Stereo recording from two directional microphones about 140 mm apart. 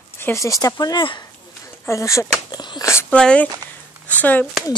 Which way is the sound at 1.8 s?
20° left (ahead or behind).